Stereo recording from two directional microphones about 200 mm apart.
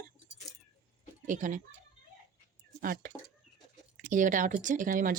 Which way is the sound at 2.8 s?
45° right (ahead or behind).